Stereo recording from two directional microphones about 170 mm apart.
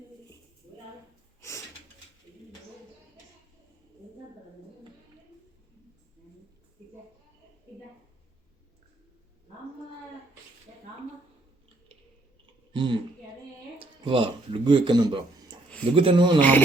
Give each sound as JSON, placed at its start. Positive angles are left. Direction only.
{"t": 1.4, "sound": "a sound", "side_deg": 15}
{"t": 12.7, "sound": "a woman's voice", "side_deg": -30}
{"t": 14.0, "sound": "speech", "side_deg": -30}
{"t": 16.4, "sound": "speech", "side_deg": 10}